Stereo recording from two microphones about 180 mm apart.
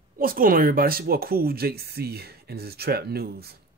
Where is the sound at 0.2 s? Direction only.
50° right (ahead or behind).